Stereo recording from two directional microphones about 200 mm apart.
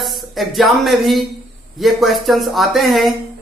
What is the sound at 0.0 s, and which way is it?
Speech, centre (ahead or behind).